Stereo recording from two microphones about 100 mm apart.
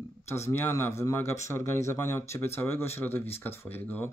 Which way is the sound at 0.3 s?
25° left (ahead or behind).